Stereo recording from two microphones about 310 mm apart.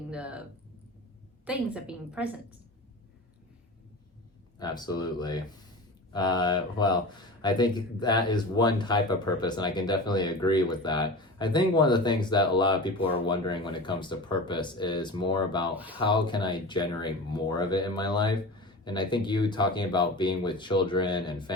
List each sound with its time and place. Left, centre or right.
0.1 s speech: centre
1.5 s a woman's voice: centre
4.6 s speech: centre
15.7 s a woman's voice: centre
16.0 s speech: centre